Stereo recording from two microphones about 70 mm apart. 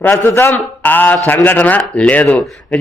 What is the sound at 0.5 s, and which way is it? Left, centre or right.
Speech, left.